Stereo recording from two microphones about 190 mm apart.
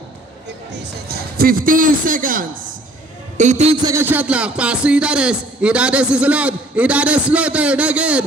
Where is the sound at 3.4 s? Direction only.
40° right (ahead or behind).